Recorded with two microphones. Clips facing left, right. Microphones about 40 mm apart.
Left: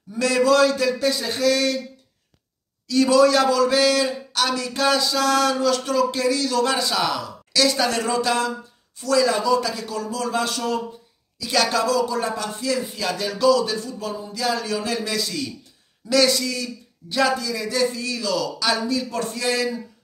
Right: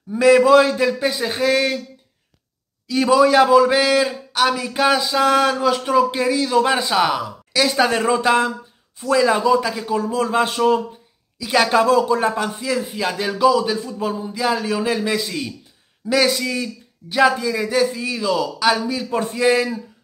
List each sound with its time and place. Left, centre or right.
0.1 s a man's voice: right
2.9 s a man's voice: centre
12.5 s a man's voice: centre